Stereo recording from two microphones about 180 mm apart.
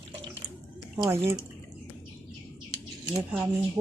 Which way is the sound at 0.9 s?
25° right (ahead or behind).